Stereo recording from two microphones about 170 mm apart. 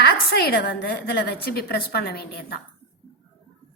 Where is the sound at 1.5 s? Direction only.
65° left (ahead or behind).